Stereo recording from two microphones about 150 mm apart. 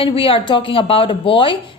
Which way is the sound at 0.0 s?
35° left (ahead or behind).